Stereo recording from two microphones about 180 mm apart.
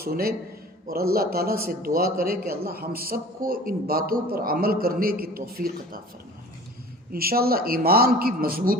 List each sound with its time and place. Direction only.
0.0 s a man's voice: 55° right (ahead or behind)
7.1 s a man's voice: 55° right (ahead or behind)